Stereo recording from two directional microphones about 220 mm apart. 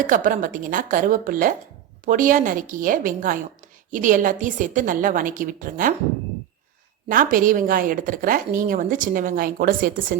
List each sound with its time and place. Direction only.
0.1 s a woman's voice: 35° right (ahead or behind)
7.1 s a woman's voice: 40° right (ahead or behind)